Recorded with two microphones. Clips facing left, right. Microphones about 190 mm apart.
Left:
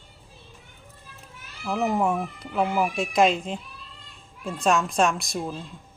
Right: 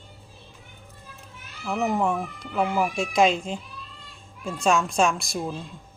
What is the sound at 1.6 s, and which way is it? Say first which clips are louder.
Speech: even; 5° left (ahead or behind).